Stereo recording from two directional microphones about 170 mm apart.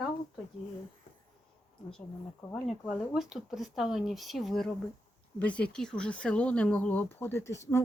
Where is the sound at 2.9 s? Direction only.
Centre (ahead or behind).